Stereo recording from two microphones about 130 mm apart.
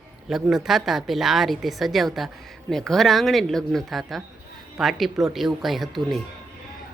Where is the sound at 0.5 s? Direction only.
Centre (ahead or behind).